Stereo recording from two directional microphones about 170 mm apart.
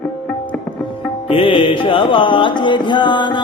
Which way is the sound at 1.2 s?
30° left (ahead or behind).